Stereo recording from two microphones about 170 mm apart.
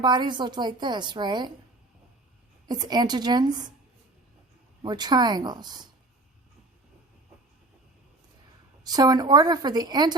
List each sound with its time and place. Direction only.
0.0 s a woman's voice: 25° right (ahead or behind)
2.6 s a woman's voice: 25° right (ahead or behind)
4.8 s a woman's voice: 25° right (ahead or behind)
8.8 s a woman's voice: 25° right (ahead or behind)